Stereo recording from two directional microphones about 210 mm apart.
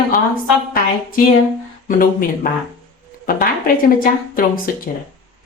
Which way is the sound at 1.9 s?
40° left (ahead or behind).